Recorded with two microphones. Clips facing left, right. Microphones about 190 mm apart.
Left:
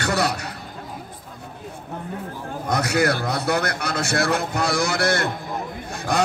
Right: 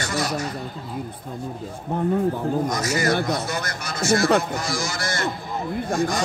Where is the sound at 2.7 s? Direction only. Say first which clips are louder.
Left 2 dB; 65° left (ahead or behind).